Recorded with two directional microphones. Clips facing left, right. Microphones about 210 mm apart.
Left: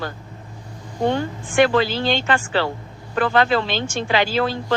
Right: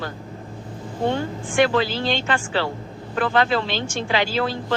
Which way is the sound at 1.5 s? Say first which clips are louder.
Left 2 dB; 55° left (ahead or behind).